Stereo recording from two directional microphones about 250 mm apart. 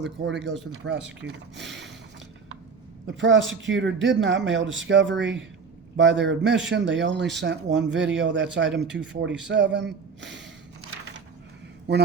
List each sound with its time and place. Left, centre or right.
0.3 s speech: right
3.1 s speech: right